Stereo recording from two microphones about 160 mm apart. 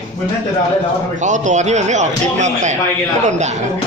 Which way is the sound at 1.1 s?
50° right (ahead or behind).